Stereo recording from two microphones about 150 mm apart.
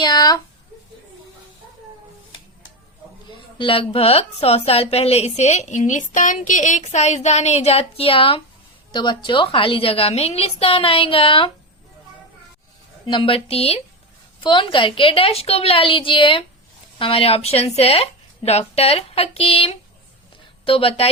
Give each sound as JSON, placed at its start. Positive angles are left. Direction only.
{"t": 0.0, "sound": "a sound", "side_deg": 25}
{"t": 3.2, "sound": "a woman's voice", "side_deg": 35}
{"t": 13.1, "sound": "speech", "side_deg": 35}